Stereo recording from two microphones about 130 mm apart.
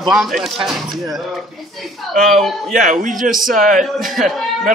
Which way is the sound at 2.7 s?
80° right.